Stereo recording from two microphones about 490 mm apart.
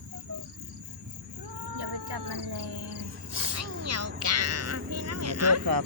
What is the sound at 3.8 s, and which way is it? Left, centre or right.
Music, right.